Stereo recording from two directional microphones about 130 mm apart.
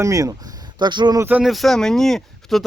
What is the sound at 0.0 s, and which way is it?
Speech, 25° right (ahead or behind).